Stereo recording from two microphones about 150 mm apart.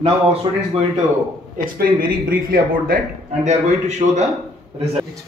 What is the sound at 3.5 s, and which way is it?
Speech, 50° right (ahead or behind).